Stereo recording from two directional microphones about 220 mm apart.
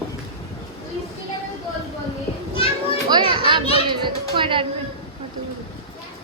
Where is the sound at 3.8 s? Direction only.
20° right (ahead or behind).